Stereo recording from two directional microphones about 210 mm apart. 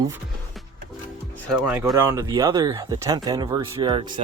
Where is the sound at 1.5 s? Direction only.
10° right (ahead or behind).